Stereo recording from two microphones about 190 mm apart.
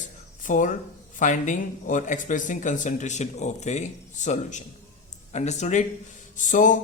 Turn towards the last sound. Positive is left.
turn(degrees=40)  # may be behind; listen again after turning